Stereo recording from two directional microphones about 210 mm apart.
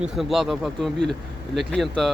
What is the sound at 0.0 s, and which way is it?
Speech, centre (ahead or behind).